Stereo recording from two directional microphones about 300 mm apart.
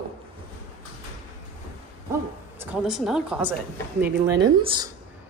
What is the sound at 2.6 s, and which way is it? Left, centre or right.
Speech, centre.